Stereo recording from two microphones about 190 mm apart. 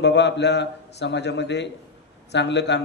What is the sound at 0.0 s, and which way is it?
A man's voice, 65° left (ahead or behind).